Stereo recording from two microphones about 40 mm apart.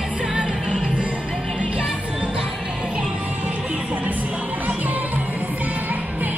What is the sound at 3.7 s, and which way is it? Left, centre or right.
Music, right.